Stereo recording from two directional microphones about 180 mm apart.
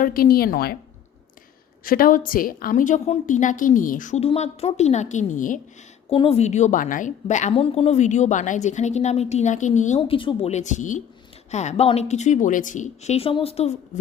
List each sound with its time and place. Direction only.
0.0 s a woman's voice: 55° left (ahead or behind)
1.8 s a woman's voice: 50° left (ahead or behind)
6.1 s a woman's voice: 35° left (ahead or behind)
10.2 s a woman's voice: 30° left (ahead or behind)